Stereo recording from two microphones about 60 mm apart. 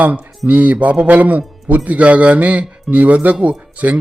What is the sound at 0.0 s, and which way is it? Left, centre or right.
Speech, right.